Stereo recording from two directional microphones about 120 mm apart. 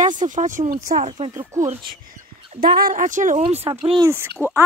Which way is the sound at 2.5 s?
90° right.